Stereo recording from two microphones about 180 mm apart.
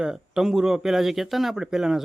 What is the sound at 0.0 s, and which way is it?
Speech, 5° right (ahead or behind).